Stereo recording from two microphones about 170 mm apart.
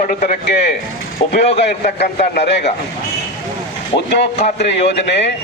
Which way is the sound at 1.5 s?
75° left (ahead or behind).